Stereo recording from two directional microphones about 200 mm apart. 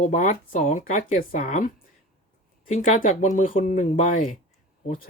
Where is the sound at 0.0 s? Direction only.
40° left (ahead or behind).